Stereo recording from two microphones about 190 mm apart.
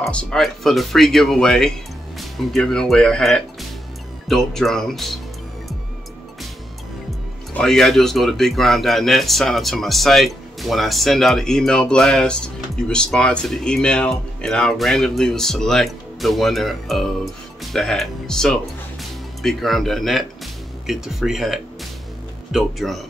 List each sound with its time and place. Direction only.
0.0 s a man's voice: 5° left (ahead or behind)
7.5 s a man's voice: 5° left (ahead or behind)